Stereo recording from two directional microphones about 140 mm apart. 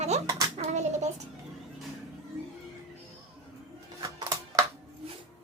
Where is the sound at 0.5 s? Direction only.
55° right (ahead or behind).